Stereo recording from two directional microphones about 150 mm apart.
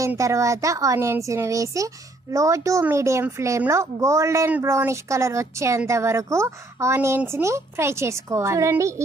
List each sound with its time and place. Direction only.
0.0 s a woman's voice: 20° right (ahead or behind)